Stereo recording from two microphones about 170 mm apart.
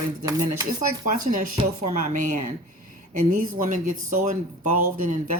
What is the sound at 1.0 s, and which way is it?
Speech, 50° right (ahead or behind).